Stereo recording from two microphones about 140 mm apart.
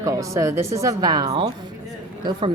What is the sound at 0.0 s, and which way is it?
A woman's voice, 25° right (ahead or behind).